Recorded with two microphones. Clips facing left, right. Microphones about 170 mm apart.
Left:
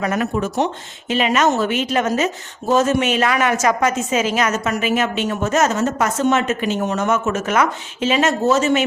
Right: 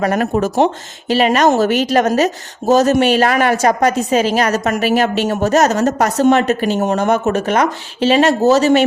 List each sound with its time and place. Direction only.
0.0 s speech: 40° right (ahead or behind)